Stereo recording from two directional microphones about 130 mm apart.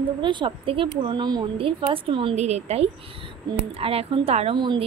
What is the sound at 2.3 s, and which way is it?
A woman's voice, 55° right (ahead or behind).